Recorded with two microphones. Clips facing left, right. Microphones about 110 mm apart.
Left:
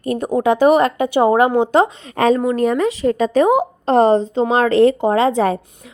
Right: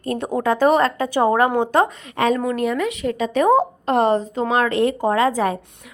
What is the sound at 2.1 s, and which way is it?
Speech, 35° left (ahead or behind).